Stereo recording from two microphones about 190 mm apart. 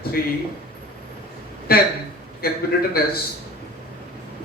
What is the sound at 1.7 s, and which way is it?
Speech, 55° left (ahead or behind).